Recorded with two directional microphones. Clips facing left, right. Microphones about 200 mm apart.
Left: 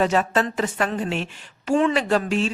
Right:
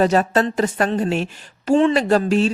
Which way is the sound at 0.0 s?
40° right (ahead or behind).